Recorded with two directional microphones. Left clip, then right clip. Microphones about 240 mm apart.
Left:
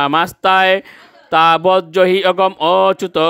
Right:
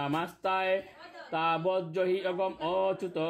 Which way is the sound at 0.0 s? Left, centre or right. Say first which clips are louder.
Left 18 dB; left.